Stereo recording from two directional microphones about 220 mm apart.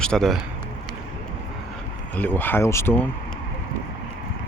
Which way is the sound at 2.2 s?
10° left (ahead or behind).